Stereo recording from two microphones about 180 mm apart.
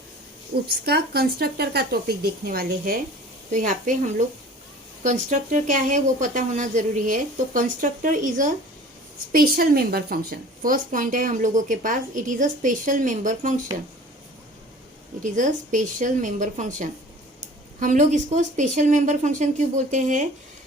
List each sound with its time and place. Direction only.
0.7 s a woman's voice: 60° right (ahead or behind)
5.0 s a woman's voice: 45° right (ahead or behind)
15.2 s a woman's voice: 45° right (ahead or behind)